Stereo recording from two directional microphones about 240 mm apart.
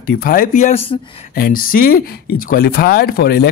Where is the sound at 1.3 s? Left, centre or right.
Left.